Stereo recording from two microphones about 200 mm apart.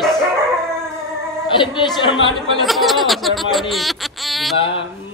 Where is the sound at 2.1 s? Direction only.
25° right (ahead or behind).